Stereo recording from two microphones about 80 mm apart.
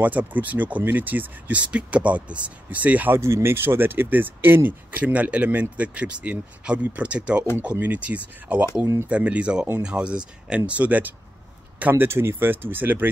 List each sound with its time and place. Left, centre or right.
0.0 s speech: right
3.2 s speech: right